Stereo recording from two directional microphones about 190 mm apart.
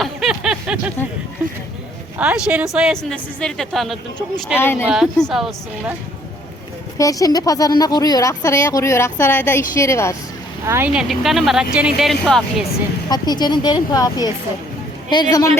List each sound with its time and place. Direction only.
0.0 s a sound: centre (ahead or behind)
2.1 s a woman's voice: 5° right (ahead or behind)
4.5 s speech: 10° left (ahead or behind)
4.9 s speech: centre (ahead or behind)
7.0 s speech: 20° left (ahead or behind)
10.7 s speech: 10° right (ahead or behind)
13.1 s speech: 20° left (ahead or behind)